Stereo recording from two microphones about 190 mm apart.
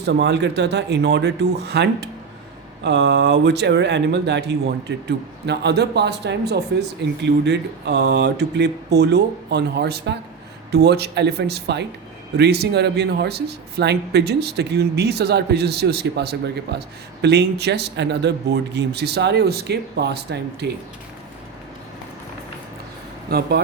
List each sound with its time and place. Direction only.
0.0 s speech: 60° right (ahead or behind)
23.3 s speech: 55° right (ahead or behind)